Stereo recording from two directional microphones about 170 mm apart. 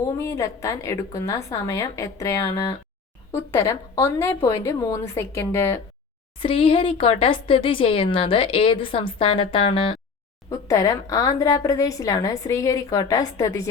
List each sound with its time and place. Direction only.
0.0 s a woman's voice: 15° left (ahead or behind)
6.4 s speech: 30° left (ahead or behind)
10.5 s a woman's voice: 20° left (ahead or behind)